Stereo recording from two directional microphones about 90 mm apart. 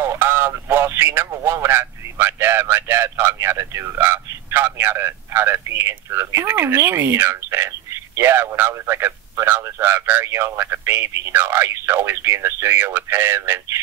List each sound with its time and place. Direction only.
0.0 s speech: 25° right (ahead or behind)